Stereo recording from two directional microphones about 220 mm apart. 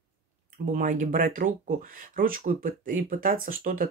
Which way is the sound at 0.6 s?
35° right (ahead or behind).